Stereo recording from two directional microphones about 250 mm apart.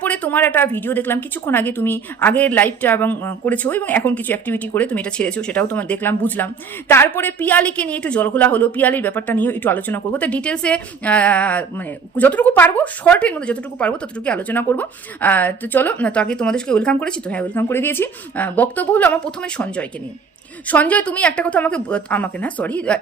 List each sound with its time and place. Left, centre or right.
0.0 s a woman's voice: centre